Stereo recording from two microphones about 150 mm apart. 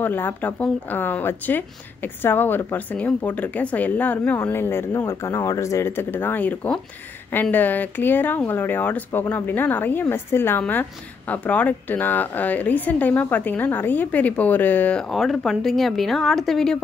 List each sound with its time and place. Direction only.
0.0 s speech: 15° left (ahead or behind)